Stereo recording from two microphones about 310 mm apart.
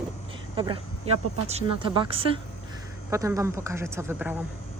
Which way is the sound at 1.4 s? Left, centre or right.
Centre.